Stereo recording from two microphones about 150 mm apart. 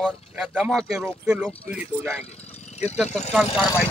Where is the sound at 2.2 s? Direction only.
45° left (ahead or behind).